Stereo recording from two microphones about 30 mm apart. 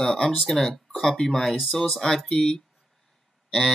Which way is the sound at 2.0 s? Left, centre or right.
Centre.